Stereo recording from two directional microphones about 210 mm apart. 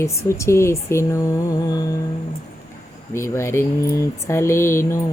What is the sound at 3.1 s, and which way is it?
Speech, 15° left (ahead or behind).